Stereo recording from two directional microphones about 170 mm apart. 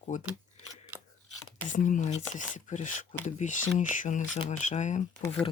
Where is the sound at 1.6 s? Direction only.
50° left (ahead or behind).